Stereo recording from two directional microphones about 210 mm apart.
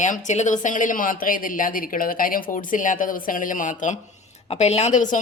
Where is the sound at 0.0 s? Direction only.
35° left (ahead or behind).